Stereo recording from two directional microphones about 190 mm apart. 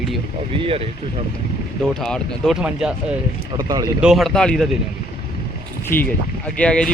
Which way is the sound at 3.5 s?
20° right (ahead or behind).